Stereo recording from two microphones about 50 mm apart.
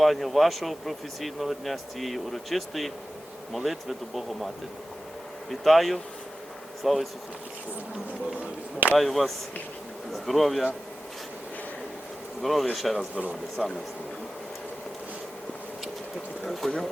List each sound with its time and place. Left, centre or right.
0.0 s speech: centre
5.5 s speech: centre
9.0 s speech: centre
12.4 s speech: centre
13.0 s speech: right
13.6 s speech: centre
16.4 s a sound: centre